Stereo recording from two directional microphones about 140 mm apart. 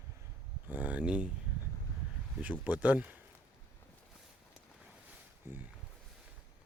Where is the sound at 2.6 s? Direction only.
10° right (ahead or behind).